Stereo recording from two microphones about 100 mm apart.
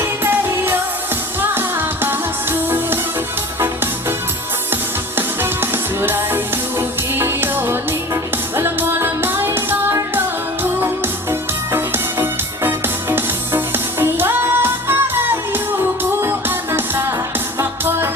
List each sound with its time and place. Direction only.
0.0 s music of asia: 20° right (ahead or behind)
1.4 s music: 20° right (ahead or behind)
4.7 s music: 20° right (ahead or behind)
16.7 s music: 20° right (ahead or behind)